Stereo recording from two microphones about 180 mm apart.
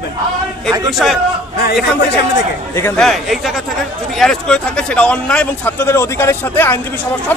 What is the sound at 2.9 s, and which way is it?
A man's voice, centre (ahead or behind).